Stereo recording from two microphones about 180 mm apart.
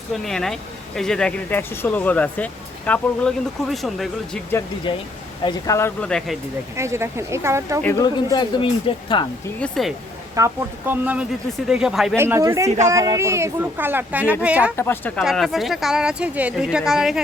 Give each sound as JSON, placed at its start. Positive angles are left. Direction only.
{"t": 0.1, "sound": "speech", "side_deg": 0}
{"t": 4.9, "sound": "speech", "side_deg": 30}
{"t": 6.1, "sound": "speech", "side_deg": 0}
{"t": 6.7, "sound": "speech", "side_deg": -15}
{"t": 7.8, "sound": "speech", "side_deg": 10}
{"t": 8.0, "sound": "speech", "side_deg": 25}
{"t": 9.6, "sound": "speech", "side_deg": 0}
{"t": 10.3, "sound": "speech", "side_deg": -15}
{"t": 12.1, "sound": "speech", "side_deg": -15}
{"t": 14.8, "sound": "speech", "side_deg": 10}
{"t": 15.2, "sound": "speech", "side_deg": 0}